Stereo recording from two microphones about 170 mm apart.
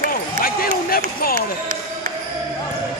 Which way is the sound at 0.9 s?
60° left (ahead or behind).